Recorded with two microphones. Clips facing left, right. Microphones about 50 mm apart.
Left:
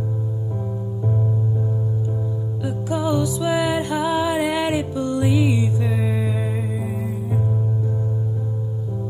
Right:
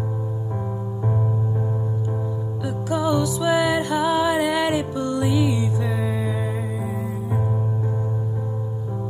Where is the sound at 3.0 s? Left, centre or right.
Centre.